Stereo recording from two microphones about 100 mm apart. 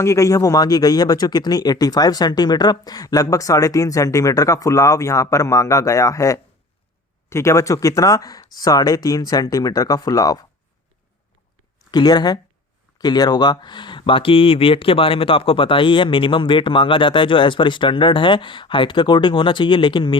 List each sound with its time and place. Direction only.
0.0 s speech: 30° left (ahead or behind)
11.9 s speech: 45° left (ahead or behind)